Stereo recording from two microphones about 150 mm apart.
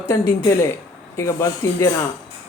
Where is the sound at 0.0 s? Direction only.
15° left (ahead or behind).